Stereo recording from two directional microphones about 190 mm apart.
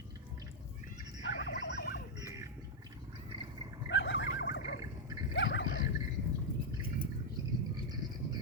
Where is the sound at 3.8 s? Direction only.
75° left (ahead or behind).